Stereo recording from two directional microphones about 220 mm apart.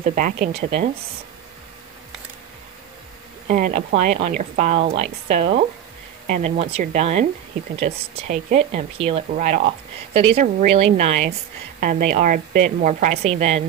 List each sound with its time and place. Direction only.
0.1 s a woman's voice: 40° right (ahead or behind)
0.5 s speech: 25° right (ahead or behind)
3.4 s a woman's voice: 40° right (ahead or behind)
10.3 s a woman's voice: 35° right (ahead or behind)
11.8 s a woman's voice: 40° right (ahead or behind)